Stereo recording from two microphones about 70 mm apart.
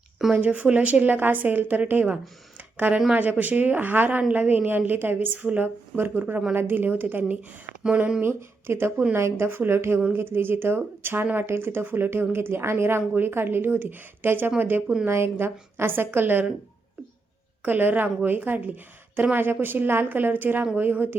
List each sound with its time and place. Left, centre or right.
0.3 s a woman's voice: right
8.2 s a woman's voice: right
17.7 s a woman's voice: right